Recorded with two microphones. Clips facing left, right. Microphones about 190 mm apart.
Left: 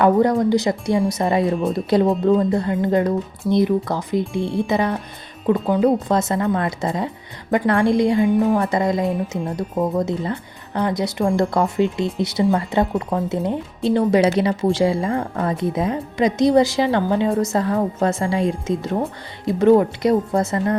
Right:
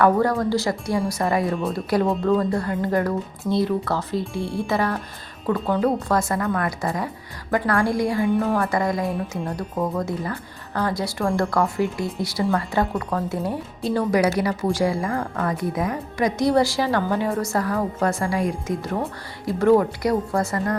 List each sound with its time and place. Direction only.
0.0 s speech: 20° left (ahead or behind)